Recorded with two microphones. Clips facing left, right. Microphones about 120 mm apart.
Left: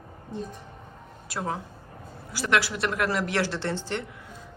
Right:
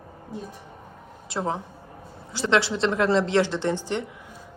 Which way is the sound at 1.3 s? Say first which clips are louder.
Right 3 dB; 25° right (ahead or behind).